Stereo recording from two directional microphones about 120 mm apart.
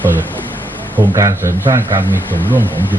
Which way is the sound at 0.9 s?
20° right (ahead or behind).